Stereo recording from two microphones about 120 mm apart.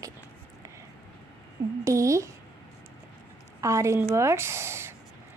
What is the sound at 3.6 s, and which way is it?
A woman's voice, 25° right (ahead or behind).